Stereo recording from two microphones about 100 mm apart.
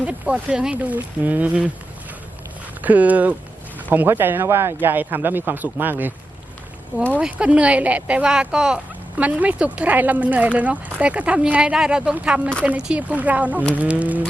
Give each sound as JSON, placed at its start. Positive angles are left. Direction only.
{"t": 0.0, "sound": "speech", "side_deg": -15}
{"t": 2.8, "sound": "speech", "side_deg": -15}
{"t": 7.2, "sound": "speech", "side_deg": -10}